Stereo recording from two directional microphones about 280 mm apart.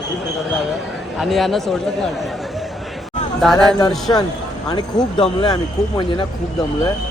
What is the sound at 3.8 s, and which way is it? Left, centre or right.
Speech, centre.